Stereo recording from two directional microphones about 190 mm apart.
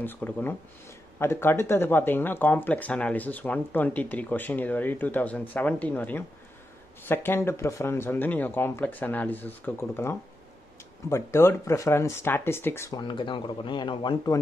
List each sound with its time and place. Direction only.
0.0 s speech: 10° left (ahead or behind)
13.0 s speech: 25° left (ahead or behind)